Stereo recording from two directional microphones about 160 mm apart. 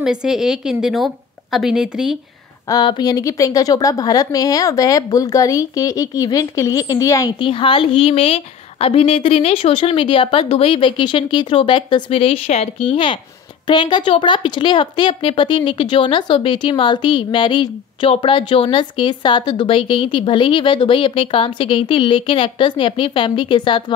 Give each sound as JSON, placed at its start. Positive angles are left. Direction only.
{"t": 0.0, "sound": "a woman's voice", "side_deg": -5}
{"t": 2.7, "sound": "a woman's voice", "side_deg": 25}